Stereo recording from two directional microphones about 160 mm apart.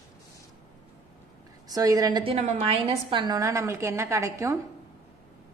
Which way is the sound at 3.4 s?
20° right (ahead or behind).